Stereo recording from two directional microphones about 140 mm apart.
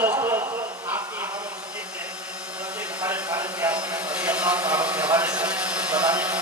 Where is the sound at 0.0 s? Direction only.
15° right (ahead or behind).